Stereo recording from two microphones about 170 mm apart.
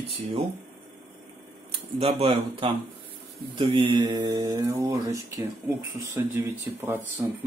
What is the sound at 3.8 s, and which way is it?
Mantra, 25° right (ahead or behind).